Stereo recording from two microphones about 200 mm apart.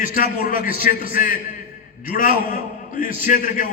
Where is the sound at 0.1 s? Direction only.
45° left (ahead or behind).